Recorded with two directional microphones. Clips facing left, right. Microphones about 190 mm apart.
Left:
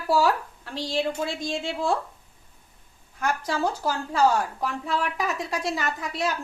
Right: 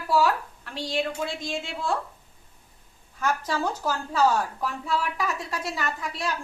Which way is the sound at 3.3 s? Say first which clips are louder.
Left 1 dB; 10° left (ahead or behind).